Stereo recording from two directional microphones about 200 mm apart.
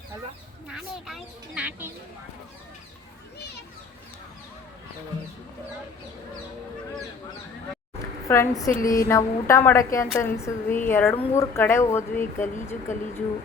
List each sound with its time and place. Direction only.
0.7 s speech: centre (ahead or behind)
8.3 s a woman's voice: 15° left (ahead or behind)
8.7 s a sound: 40° left (ahead or behind)
9.0 s a woman's voice: 15° left (ahead or behind)